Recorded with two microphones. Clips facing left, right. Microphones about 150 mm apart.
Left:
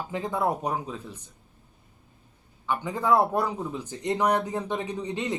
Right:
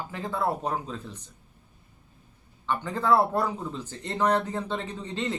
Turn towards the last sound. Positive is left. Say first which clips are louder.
# left 2 dB
turn(degrees=15)  # may be behind; listen again after turning